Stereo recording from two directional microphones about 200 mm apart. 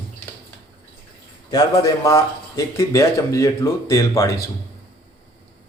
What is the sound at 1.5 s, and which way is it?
Speech, 20° left (ahead or behind).